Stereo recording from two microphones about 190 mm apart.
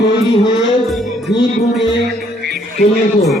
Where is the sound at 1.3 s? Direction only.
65° left (ahead or behind).